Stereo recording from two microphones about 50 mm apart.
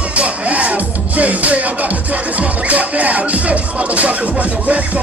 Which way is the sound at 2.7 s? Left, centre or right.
Right.